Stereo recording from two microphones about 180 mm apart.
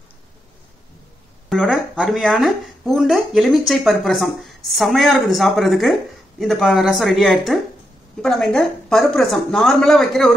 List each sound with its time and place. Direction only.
1.5 s speech: centre (ahead or behind)